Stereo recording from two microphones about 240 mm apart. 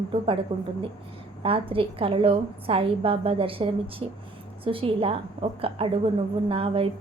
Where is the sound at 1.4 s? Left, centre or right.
Right.